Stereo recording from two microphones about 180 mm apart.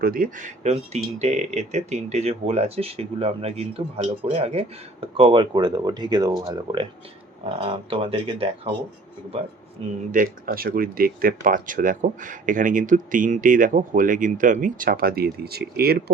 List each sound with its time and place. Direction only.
0.0 s speech: 50° right (ahead or behind); by 8.8 s 30° right (ahead or behind)
10.1 s speech: 50° right (ahead or behind)